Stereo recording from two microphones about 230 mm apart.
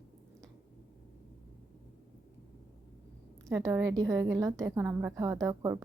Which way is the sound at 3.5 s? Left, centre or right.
Centre.